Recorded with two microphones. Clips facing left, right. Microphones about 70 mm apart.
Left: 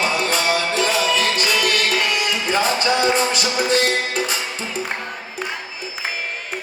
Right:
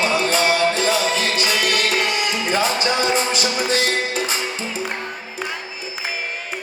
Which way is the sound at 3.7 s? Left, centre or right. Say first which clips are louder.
Left 1 dB; left.